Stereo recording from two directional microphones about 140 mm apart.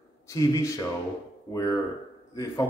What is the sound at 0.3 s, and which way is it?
Speech, 25° left (ahead or behind).